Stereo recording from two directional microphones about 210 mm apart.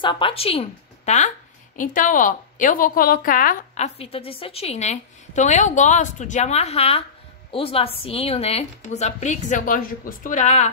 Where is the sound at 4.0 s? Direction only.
25° left (ahead or behind).